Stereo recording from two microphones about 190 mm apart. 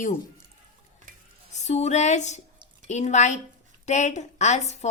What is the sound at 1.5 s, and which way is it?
A woman's voice, 35° left (ahead or behind).